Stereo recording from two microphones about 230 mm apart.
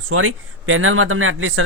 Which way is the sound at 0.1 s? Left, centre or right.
Right.